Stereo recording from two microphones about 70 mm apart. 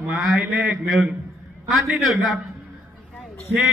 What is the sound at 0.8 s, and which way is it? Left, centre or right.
A man's voice, centre.